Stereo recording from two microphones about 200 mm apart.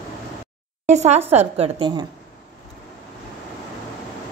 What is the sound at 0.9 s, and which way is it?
A woman's voice, 35° right (ahead or behind).